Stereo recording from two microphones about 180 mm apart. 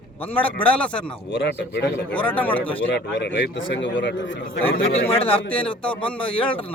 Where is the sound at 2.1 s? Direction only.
10° left (ahead or behind).